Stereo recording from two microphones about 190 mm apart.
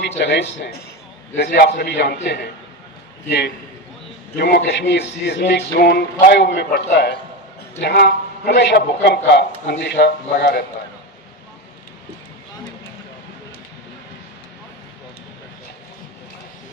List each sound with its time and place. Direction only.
0.2 s speech: 70° left (ahead or behind)
4.4 s speech: 60° left (ahead or behind)